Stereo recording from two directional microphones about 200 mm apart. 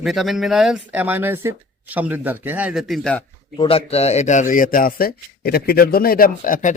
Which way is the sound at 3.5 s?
25° left (ahead or behind).